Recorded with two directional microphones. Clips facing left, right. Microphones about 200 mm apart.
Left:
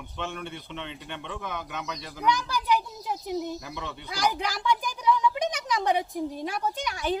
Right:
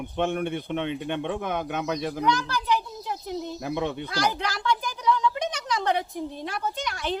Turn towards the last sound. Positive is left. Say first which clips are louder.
# left 1 dB
turn(degrees=10)  # may be behind; listen again after turning